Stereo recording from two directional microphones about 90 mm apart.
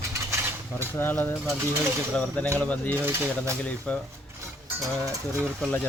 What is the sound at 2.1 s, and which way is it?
Mechanisms, 15° left (ahead or behind).